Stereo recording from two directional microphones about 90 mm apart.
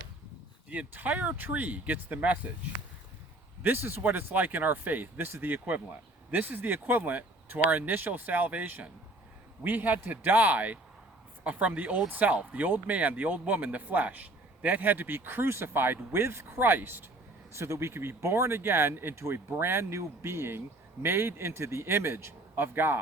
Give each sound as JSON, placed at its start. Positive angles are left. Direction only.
{"t": 0.7, "sound": "speech", "side_deg": -20}
{"t": 3.6, "sound": "speech", "side_deg": -25}